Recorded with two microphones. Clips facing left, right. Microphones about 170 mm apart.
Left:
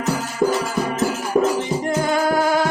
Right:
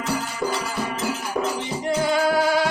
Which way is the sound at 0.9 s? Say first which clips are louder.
Left 9 dB; 45° left (ahead or behind).